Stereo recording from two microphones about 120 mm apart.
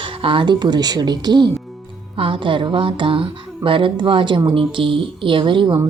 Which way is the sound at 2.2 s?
45° right (ahead or behind).